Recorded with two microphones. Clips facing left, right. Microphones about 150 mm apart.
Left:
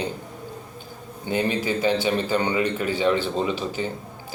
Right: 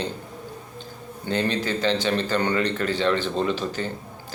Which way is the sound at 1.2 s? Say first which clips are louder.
Left 1 dB; 10° left (ahead or behind).